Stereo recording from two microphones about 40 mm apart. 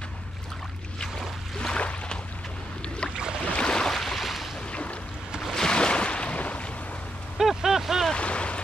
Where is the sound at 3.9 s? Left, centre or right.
Centre.